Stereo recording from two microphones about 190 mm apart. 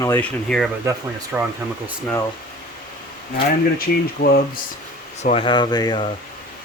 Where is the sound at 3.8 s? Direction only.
55° left (ahead or behind).